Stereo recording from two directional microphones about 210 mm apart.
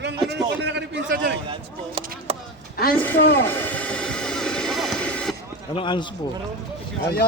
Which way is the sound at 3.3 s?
10° left (ahead or behind).